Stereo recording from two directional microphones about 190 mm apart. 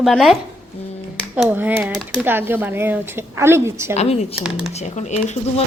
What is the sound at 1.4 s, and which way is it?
Speech, 10° right (ahead or behind).